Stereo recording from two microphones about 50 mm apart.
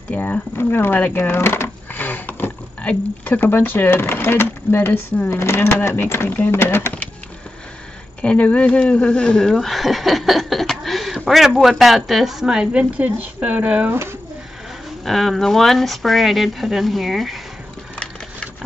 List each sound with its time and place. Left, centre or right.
0.2 s speech: left
1.4 s speech: left
2.0 s a sound: left
3.3 s speech: left
8.2 s speech: left; by 12.6 s centre
12.7 s speech: right
15.0 s speech: centre